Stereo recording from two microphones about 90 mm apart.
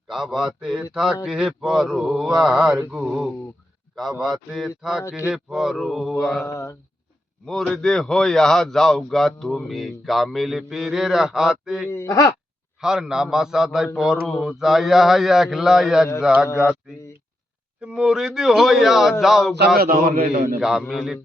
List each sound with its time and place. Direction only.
0.1 s a man's voice: 5° right (ahead or behind)
6.4 s speech: 35° left (ahead or behind)
7.4 s a man's voice: 5° left (ahead or behind)
11.9 s speech: 35° left (ahead or behind)
12.8 s a man's voice: 5° right (ahead or behind)
17.7 s a man's voice: 10° right (ahead or behind)